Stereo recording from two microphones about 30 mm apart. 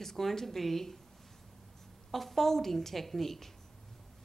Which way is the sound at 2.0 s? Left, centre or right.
Centre.